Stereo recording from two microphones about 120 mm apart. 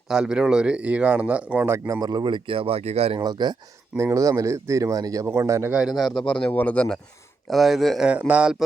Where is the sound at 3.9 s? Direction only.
25° right (ahead or behind).